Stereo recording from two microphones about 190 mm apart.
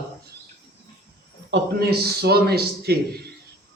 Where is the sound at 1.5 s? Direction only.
60° right (ahead or behind).